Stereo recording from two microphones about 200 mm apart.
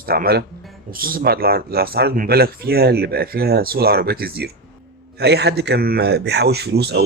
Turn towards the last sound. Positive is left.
turn(degrees=-55)  # may be behind; listen again after turning